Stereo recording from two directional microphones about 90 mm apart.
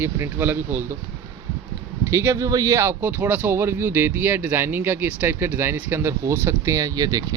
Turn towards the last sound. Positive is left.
turn(degrees=-45)  # may be behind; listen again after turning